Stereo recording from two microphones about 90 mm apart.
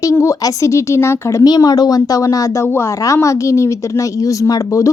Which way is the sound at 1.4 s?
45° left (ahead or behind).